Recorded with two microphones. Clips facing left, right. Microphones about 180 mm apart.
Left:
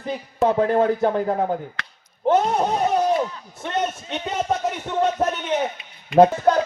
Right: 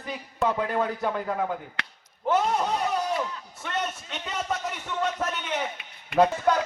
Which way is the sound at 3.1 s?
35° left (ahead or behind).